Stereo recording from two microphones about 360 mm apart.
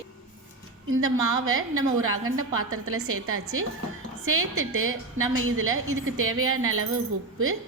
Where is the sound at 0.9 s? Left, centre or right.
Right.